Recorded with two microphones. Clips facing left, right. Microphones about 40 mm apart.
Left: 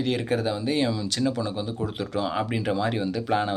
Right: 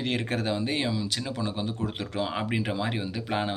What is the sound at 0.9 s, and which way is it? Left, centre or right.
Speech, centre.